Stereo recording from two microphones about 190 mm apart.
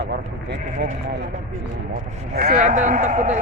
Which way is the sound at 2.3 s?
50° right (ahead or behind).